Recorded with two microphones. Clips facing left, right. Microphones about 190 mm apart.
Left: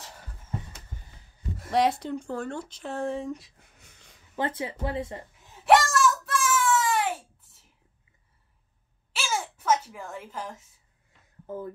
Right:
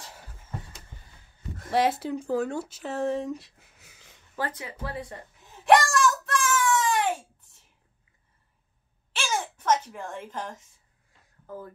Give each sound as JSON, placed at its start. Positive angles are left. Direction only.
{"t": 1.7, "sound": "speech", "side_deg": 0}
{"t": 4.4, "sound": "speech", "side_deg": 25}
{"t": 5.7, "sound": "wail", "side_deg": 0}
{"t": 9.1, "sound": "a sound", "side_deg": 5}
{"t": 11.5, "sound": "speech", "side_deg": 20}